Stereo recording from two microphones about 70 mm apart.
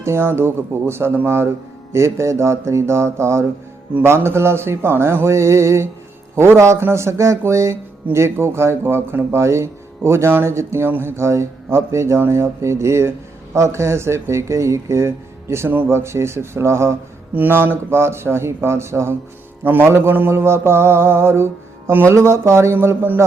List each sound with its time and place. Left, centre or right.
0.0 s speech: right
17.3 s speech: right